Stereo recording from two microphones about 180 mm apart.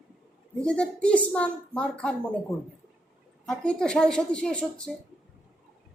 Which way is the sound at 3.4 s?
5° left (ahead or behind).